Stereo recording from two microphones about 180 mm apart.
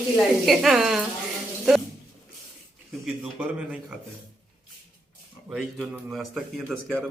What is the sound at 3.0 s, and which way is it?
Speech, 5° right (ahead or behind).